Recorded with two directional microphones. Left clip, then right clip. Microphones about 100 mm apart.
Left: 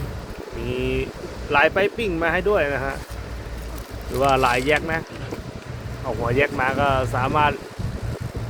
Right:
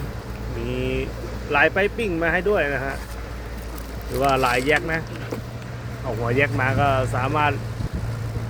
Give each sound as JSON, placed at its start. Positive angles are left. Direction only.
{"t": 0.6, "sound": "vehicle", "side_deg": 35}
{"t": 1.5, "sound": "speech", "side_deg": 30}
{"t": 4.3, "sound": "speech", "side_deg": 40}
{"t": 6.2, "sound": "speech", "side_deg": 30}